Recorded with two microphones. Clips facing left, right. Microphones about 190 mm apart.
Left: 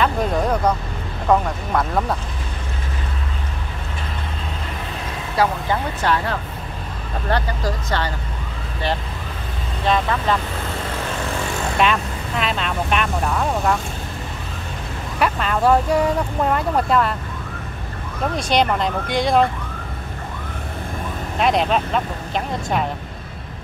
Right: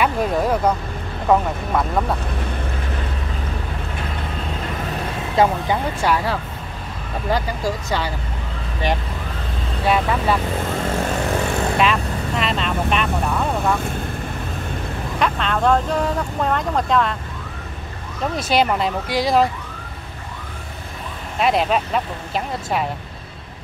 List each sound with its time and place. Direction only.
0.0 s vehicle: 5° right (ahead or behind)
1.3 s speech: centre (ahead or behind)
5.3 s speech: 20° right (ahead or behind)
6.0 s speech: 10° right (ahead or behind)
9.8 s speech: 10° right (ahead or behind)
11.8 s vehicle: centre (ahead or behind)
15.1 s speech: 5° left (ahead or behind)
18.3 s speech: 5° right (ahead or behind)
21.4 s speech: 5° right (ahead or behind)